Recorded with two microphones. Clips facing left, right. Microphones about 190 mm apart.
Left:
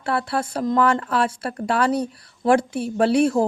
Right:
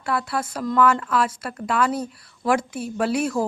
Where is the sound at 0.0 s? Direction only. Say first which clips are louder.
Left 2 dB; 30° left (ahead or behind).